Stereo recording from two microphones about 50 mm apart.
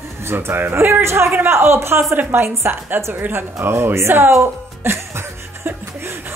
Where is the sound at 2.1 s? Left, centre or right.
Right.